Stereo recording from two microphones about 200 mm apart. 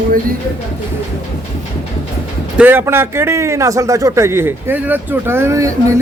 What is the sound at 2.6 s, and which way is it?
Speech, 10° right (ahead or behind).